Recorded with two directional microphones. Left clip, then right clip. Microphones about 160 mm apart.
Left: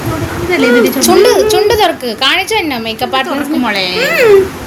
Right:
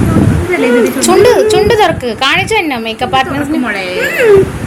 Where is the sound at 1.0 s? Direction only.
5° right (ahead or behind).